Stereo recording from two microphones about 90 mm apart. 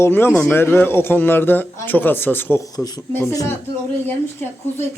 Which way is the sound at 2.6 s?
45° left (ahead or behind).